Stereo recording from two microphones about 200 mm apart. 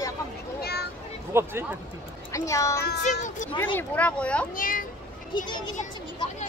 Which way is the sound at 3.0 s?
40° left (ahead or behind).